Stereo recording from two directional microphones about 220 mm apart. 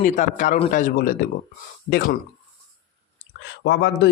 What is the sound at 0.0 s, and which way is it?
Speech, 35° left (ahead or behind).